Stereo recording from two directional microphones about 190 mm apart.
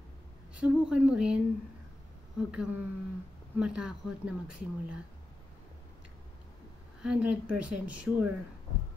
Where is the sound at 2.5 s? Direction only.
5° right (ahead or behind).